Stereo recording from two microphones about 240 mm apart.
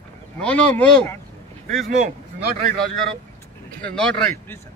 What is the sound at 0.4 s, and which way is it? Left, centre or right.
Speech, centre.